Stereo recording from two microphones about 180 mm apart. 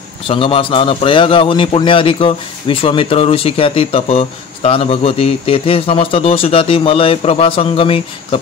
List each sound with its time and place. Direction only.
0.3 s a man's voice: 30° left (ahead or behind)